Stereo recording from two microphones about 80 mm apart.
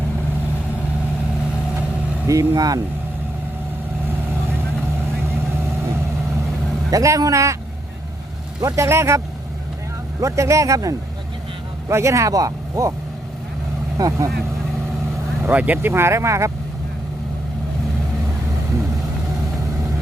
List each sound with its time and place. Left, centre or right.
2.2 s speech: right
2.6 s speech: right
6.9 s speech: right
8.6 s speech: right
13.9 s speech: right
15.4 s speech: right
15.9 s speech: right